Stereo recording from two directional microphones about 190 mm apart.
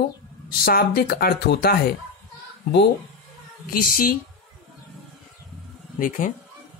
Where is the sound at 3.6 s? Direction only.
50° left (ahead or behind).